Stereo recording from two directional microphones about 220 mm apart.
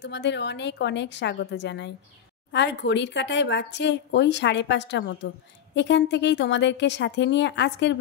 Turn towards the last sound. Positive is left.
turn(degrees=55)  # may be behind; listen again after turning